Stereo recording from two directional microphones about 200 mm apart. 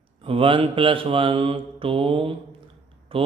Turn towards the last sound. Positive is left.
turn(degrees=-25)  # may be behind; listen again after turning